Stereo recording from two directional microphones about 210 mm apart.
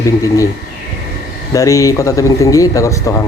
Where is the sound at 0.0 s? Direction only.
15° left (ahead or behind).